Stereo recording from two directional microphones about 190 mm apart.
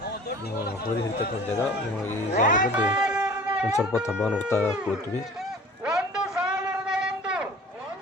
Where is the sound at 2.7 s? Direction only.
5° right (ahead or behind).